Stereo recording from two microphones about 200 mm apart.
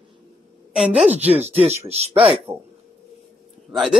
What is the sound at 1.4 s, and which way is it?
Speech, 30° right (ahead or behind).